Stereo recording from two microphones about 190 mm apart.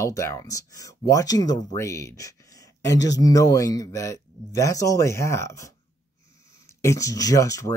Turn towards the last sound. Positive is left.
turn(degrees=15)  # may be behind; listen again after turning